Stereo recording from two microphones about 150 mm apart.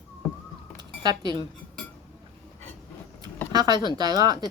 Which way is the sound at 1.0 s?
30° right (ahead or behind).